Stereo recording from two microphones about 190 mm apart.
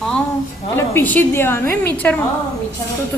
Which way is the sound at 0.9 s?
10° left (ahead or behind).